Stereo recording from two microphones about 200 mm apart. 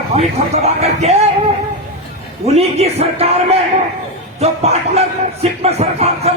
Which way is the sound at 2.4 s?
30° right (ahead or behind).